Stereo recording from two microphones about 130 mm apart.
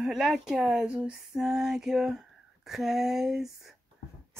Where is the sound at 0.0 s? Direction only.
Centre (ahead or behind).